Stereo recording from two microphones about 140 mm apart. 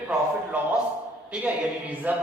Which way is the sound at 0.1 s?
10° right (ahead or behind).